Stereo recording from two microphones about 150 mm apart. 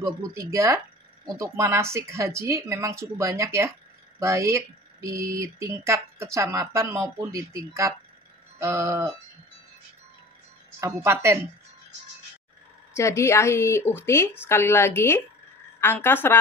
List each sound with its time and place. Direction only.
0.0 s speech: 20° right (ahead or behind)
10.8 s speech: 20° right (ahead or behind)
12.9 s speech: 20° left (ahead or behind)